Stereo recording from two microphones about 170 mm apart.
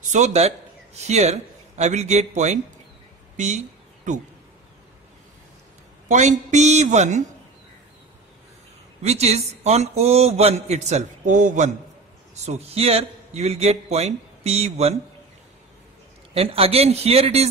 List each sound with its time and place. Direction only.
0.0 s a man's voice: 45° right (ahead or behind)
3.3 s a sound: 45° right (ahead or behind)
6.0 s a woman's voice: 45° right (ahead or behind)
9.0 s a man's voice: 40° right (ahead or behind)
12.4 s a man's voice: 35° right (ahead or behind)
16.3 s a man's voice: 35° right (ahead or behind)